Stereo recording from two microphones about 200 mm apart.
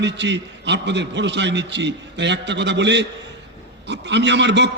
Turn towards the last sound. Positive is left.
turn(degrees=-60)  # may be behind; listen again after turning